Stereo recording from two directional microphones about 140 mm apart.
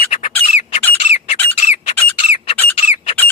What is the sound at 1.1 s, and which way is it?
Squawk, 50° left (ahead or behind).